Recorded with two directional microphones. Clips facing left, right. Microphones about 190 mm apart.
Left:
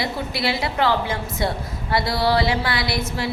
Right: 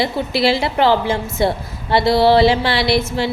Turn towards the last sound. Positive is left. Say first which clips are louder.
# right 8 dB
turn(degrees=-25)  # may be behind; listen again after turning